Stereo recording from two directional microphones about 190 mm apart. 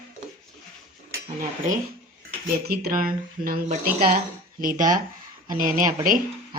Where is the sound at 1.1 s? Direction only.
45° right (ahead or behind).